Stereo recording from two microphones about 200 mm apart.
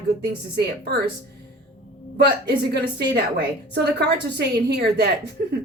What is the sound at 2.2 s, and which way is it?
Speech, 55° right (ahead or behind).